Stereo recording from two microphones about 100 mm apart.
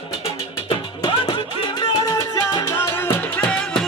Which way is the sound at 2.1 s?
35° left (ahead or behind).